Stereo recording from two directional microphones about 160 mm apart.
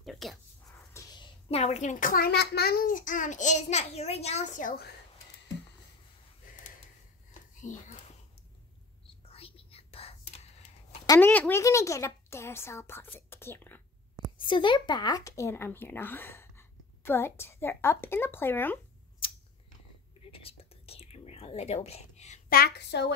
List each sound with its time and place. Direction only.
0.0 s speech: centre (ahead or behind)
1.0 s a sound: 15° left (ahead or behind)
1.5 s a child's voice: 40° left (ahead or behind); by 4.9 s 70° left (ahead or behind)
7.7 s speech: 55° left (ahead or behind)
9.2 s whispering: 40° left (ahead or behind)
11.1 s a woman's voice: 10° left (ahead or behind)
14.4 s speech: 30° left (ahead or behind); by 18.8 s 15° left (ahead or behind)
19.2 s scissors: 35° left (ahead or behind)
20.2 s whispering: 35° left (ahead or behind)
22.5 s a woman's voice: 80° left